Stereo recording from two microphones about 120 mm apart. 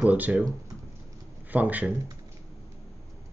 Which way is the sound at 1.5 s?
15° right (ahead or behind).